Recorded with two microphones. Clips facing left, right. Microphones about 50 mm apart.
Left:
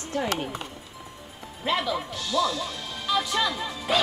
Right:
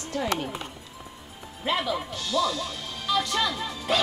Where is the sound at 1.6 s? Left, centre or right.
Centre.